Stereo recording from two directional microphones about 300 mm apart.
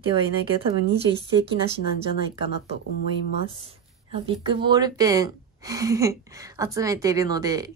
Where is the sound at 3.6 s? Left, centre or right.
Centre.